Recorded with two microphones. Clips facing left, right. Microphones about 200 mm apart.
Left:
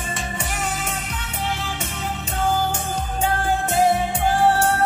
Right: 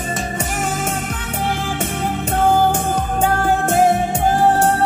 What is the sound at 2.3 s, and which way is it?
Music, 55° right (ahead or behind).